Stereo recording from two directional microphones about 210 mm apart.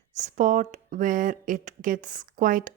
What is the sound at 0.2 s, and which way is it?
Speech, 35° right (ahead or behind).